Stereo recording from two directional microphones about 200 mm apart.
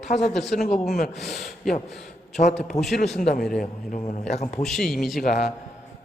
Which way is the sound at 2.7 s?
Centre (ahead or behind).